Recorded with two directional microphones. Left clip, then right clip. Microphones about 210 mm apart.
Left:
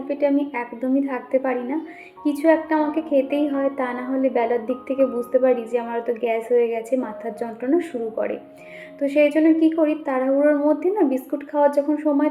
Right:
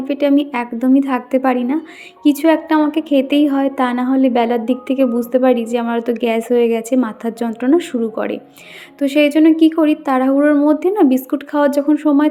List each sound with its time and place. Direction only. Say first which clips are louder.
0.1 s a woman's voice: right 5 dB; 50° right (ahead or behind)